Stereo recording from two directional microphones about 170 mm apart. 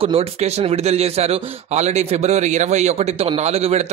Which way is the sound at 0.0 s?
35° right (ahead or behind).